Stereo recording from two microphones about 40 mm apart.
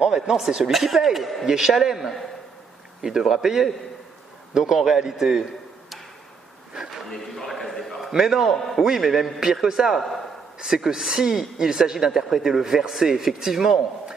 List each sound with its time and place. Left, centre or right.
0.0 s speech: centre
7.1 s a sound: centre
8.1 s speech: centre
8.5 s a man's voice: centre
8.8 s speech: centre
9.9 s a man's voice: centre
10.6 s speech: centre